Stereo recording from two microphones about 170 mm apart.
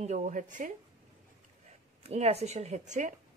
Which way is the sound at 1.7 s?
40° right (ahead or behind).